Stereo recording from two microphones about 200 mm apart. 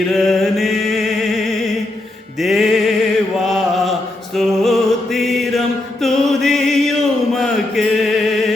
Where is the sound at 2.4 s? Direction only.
Centre (ahead or behind).